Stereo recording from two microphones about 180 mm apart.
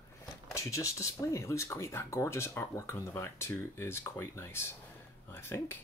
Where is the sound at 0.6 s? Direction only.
15° left (ahead or behind).